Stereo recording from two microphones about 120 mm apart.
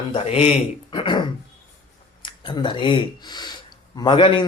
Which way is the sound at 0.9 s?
40° left (ahead or behind).